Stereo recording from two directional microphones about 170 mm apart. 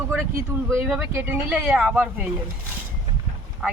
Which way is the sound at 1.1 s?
10° right (ahead or behind).